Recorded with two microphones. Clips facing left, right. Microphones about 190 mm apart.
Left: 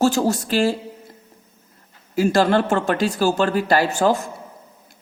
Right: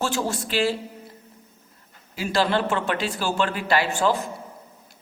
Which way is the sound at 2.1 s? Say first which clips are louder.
Left 6 dB; 45° left (ahead or behind).